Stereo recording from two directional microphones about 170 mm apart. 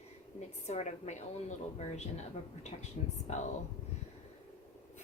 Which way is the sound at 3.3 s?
40° left (ahead or behind).